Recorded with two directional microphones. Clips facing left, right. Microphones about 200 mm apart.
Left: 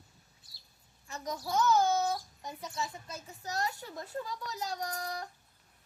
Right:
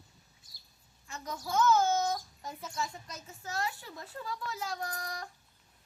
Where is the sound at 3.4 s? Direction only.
40° left (ahead or behind).